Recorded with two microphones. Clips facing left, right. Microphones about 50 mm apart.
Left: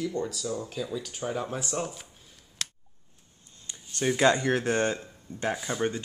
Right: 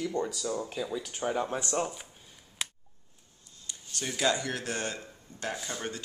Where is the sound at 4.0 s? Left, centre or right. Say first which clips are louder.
Left 6 dB; left.